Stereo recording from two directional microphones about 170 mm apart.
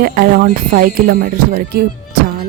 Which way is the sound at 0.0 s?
60° right (ahead or behind).